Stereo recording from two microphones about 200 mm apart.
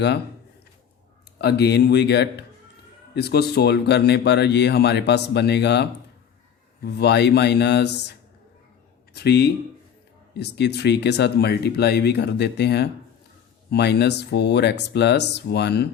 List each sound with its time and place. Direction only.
1.4 s speech: 55° left (ahead or behind)
9.1 s speech: 55° left (ahead or behind)